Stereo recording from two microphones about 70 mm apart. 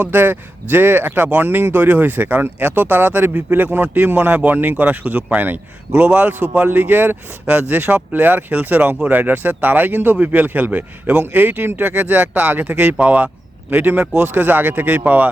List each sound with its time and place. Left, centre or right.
0.0 s speech: right